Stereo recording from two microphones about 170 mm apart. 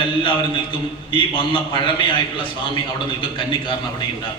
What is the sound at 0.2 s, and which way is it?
A man's voice, 30° left (ahead or behind).